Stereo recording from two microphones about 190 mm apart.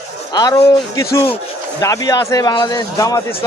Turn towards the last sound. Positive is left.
turn(degrees=15)  # may be behind; listen again after turning